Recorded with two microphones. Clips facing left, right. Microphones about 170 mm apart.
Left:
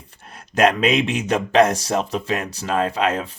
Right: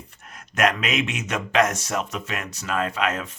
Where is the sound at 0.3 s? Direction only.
30° left (ahead or behind).